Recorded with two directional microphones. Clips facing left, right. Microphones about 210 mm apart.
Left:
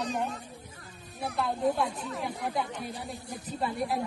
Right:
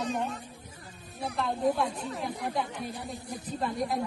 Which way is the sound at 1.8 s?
30° right (ahead or behind).